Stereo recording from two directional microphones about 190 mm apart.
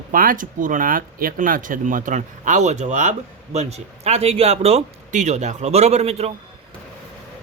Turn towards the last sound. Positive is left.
turn(degrees=-35)  # may be behind; listen again after turning